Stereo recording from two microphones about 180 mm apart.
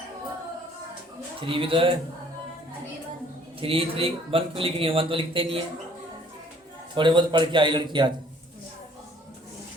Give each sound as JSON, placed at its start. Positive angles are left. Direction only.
{"t": 1.5, "sound": "speech", "side_deg": -30}
{"t": 3.6, "sound": "a man's voice", "side_deg": -30}
{"t": 6.9, "sound": "speech", "side_deg": -25}